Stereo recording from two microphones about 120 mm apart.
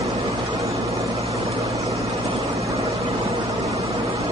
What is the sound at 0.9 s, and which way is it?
Vehicle, 25° right (ahead or behind).